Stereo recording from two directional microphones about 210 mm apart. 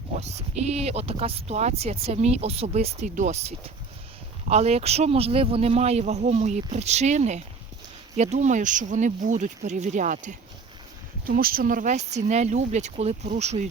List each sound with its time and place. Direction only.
0.2 s speech: 30° right (ahead or behind)